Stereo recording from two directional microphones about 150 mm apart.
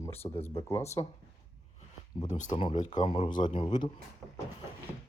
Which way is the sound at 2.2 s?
55° left (ahead or behind).